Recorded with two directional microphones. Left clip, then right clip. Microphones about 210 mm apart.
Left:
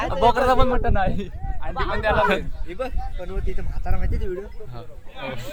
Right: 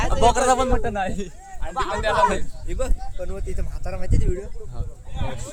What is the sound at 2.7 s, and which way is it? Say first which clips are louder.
Speech: even; 55° right (ahead or behind).